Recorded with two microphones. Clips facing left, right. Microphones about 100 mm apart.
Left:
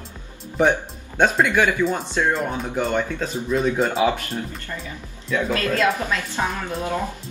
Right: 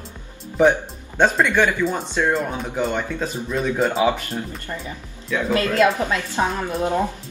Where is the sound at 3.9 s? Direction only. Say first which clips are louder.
Right 1 dB; 30° right (ahead or behind).